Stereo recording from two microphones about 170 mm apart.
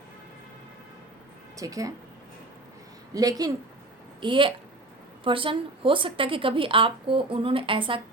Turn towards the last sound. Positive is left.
turn(degrees=-30)  # may be behind; listen again after turning